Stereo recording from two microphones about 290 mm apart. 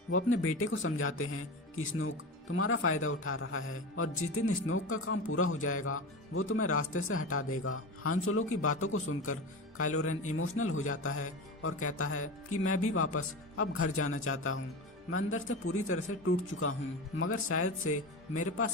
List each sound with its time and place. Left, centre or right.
0.1 s speech: left